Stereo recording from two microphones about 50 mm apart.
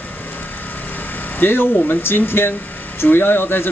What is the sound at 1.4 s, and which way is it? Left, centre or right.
Speech, left.